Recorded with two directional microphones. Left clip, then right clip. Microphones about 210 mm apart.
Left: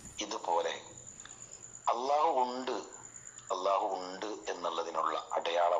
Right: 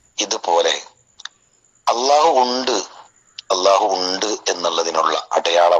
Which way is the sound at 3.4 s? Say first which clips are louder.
Right 16 dB; 50° right (ahead or behind).